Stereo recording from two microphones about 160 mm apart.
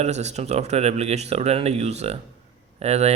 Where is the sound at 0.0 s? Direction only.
45° right (ahead or behind).